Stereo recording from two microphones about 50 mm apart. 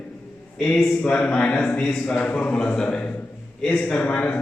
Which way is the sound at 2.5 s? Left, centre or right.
Centre.